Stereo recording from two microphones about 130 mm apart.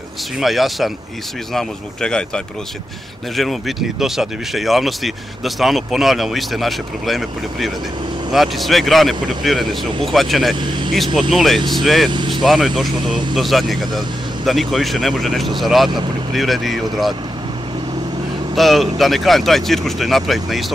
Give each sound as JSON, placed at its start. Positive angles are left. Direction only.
{"t": 0.4, "sound": "speech", "side_deg": 0}
{"t": 10.6, "sound": "speech", "side_deg": -35}
{"t": 11.1, "sound": "speech", "side_deg": 0}
{"t": 12.1, "sound": "speech", "side_deg": -35}
{"t": 12.4, "sound": "speech", "side_deg": 0}
{"t": 13.0, "sound": "speech", "side_deg": -35}
{"t": 13.3, "sound": "speech", "side_deg": 0}
{"t": 18.5, "sound": "speech", "side_deg": 0}